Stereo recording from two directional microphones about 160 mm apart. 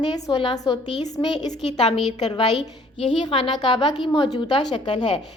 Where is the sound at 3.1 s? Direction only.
30° left (ahead or behind).